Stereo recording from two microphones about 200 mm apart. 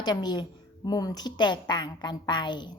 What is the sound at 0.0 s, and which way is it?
A woman's voice, 20° left (ahead or behind).